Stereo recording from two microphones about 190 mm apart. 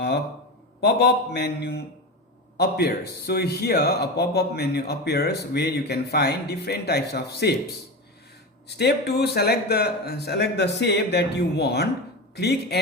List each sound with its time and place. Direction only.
0.8 s speech: 60° left (ahead or behind)
8.6 s speech: 60° left (ahead or behind)